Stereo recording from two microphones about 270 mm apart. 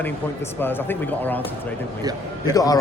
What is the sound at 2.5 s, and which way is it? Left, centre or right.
Speech, centre.